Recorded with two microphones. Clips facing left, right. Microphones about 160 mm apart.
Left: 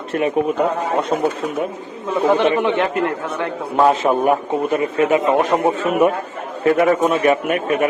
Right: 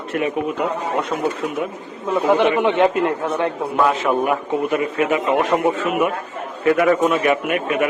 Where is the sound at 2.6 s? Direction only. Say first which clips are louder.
Right 2 dB; 20° right (ahead or behind).